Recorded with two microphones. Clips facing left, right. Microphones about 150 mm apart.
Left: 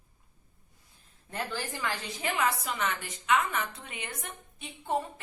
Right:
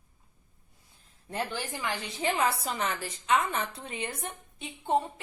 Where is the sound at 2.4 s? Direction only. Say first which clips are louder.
Right 1 dB; 35° right (ahead or behind).